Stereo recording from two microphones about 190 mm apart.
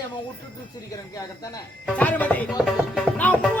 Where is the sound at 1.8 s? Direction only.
5° left (ahead or behind).